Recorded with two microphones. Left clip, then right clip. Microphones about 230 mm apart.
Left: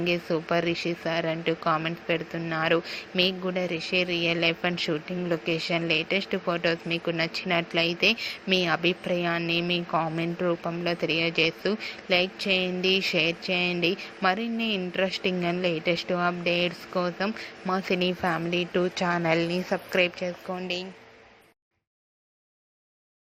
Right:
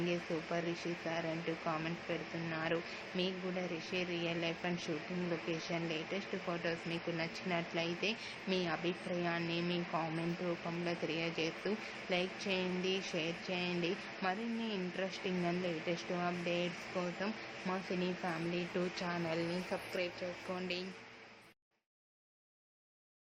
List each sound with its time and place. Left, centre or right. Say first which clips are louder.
0.1 s speech: left 12 dB; left
20.5 s a woman's voice: left 9 dB; centre